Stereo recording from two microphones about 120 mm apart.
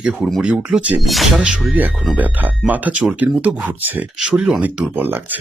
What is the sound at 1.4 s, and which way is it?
Speech, 15° right (ahead or behind).